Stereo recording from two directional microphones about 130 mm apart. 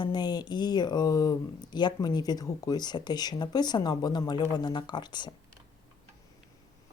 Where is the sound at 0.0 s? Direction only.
35° left (ahead or behind).